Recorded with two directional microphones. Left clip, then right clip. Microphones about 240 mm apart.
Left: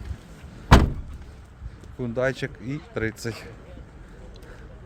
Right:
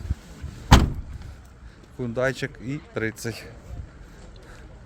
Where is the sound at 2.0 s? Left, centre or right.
Centre.